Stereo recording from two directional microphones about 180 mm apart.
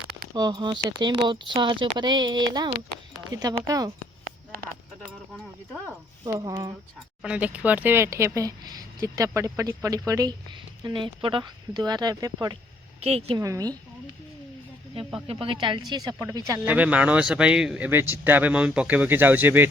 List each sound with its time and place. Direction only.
0.3 s speech: 25° right (ahead or behind)
6.2 s speech: 20° right (ahead or behind)
7.2 s speech: 5° right (ahead or behind)
13.0 s speech: 35° right (ahead or behind)
13.4 s speech: 20° right (ahead or behind)
15.3 s speech: 30° right (ahead or behind); by 19.6 s 10° right (ahead or behind)